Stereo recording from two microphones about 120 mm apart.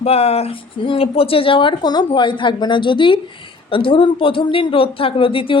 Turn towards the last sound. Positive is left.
turn(degrees=45)  # may be behind; listen again after turning